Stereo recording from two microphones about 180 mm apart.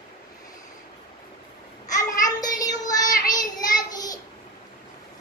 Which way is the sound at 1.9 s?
20° left (ahead or behind).